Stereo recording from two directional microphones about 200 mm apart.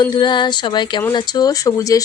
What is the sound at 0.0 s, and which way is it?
A woman's voice, 20° left (ahead or behind).